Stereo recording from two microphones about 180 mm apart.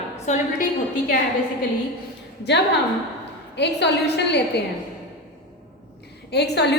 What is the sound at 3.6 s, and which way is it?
A woman's voice, 70° left (ahead or behind).